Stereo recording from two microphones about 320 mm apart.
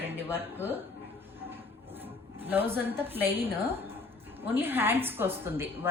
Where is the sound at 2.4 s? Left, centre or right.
Centre.